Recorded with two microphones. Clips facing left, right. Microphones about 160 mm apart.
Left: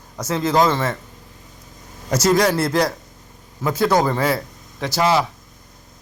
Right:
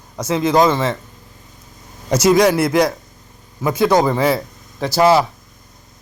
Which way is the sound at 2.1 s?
20° right (ahead or behind).